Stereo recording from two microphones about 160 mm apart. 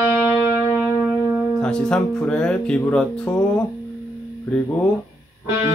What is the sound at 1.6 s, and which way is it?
Speech, 5° left (ahead or behind).